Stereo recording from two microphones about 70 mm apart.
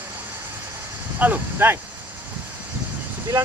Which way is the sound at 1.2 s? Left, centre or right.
Right.